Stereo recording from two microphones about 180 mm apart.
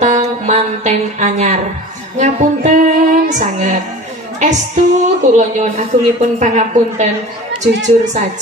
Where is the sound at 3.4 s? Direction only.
40° right (ahead or behind).